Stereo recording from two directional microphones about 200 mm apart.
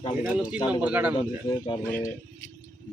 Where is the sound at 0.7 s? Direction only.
5° right (ahead or behind).